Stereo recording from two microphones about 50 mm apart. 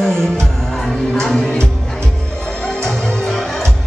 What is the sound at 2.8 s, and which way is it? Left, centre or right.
Music, centre.